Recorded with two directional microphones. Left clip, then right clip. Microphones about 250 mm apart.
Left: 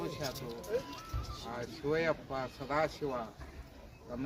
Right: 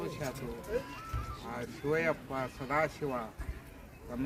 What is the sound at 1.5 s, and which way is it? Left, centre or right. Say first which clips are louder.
Speech: right 1 dB; centre.